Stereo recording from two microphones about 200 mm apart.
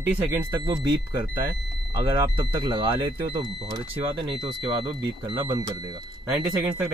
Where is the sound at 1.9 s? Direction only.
15° right (ahead or behind).